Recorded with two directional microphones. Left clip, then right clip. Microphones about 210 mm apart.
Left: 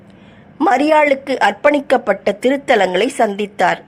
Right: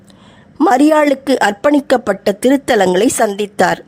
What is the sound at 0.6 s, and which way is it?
A woman's voice, 40° right (ahead or behind).